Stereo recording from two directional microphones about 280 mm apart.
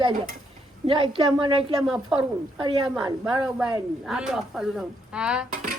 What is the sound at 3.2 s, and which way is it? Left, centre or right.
A woman's voice, centre.